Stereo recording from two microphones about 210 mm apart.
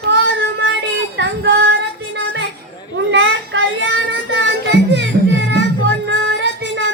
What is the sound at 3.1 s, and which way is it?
Child singing, 60° right (ahead or behind).